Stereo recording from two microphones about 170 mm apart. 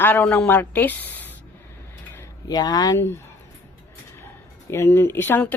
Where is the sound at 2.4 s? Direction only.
20° left (ahead or behind).